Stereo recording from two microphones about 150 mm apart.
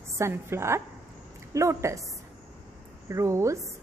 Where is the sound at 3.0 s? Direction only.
20° right (ahead or behind).